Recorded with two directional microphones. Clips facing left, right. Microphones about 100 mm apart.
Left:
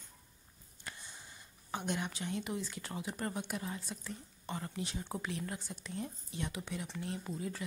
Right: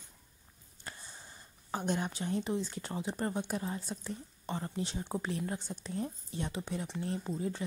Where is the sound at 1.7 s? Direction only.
35° right (ahead or behind).